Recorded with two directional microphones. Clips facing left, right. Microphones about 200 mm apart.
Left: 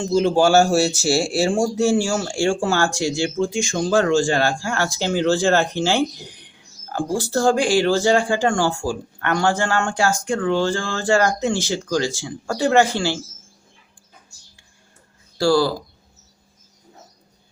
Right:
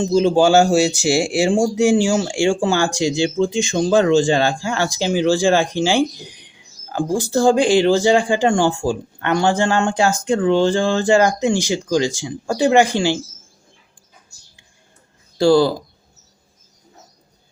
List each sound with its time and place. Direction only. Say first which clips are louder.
0.0 s speech: right 3 dB; 15° right (ahead or behind)
15.4 s speech: right 4 dB; 20° right (ahead or behind)